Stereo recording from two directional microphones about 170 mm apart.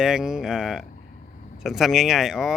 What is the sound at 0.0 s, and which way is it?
Speech, 5° right (ahead or behind).